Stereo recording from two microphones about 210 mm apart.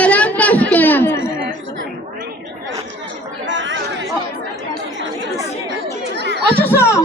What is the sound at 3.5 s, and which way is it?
Chatter, 60° right (ahead or behind).